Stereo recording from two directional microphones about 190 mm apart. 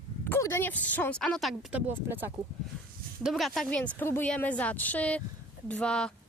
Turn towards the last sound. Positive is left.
turn(degrees=5)  # may be behind; listen again after turning